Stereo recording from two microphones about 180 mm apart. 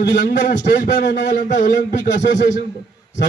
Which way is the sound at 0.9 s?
80° left.